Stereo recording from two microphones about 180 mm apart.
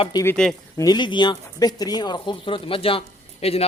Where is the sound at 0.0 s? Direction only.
20° left (ahead or behind).